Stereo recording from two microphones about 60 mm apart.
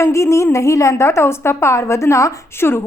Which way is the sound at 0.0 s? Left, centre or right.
Left.